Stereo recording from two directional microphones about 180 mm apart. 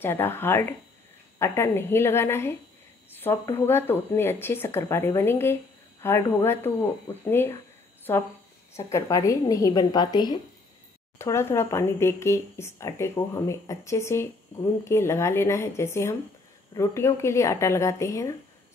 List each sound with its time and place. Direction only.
0.0 s speech: 10° left (ahead or behind)